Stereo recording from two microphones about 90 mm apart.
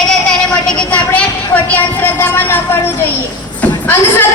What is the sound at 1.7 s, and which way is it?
Speech, 20° left (ahead or behind).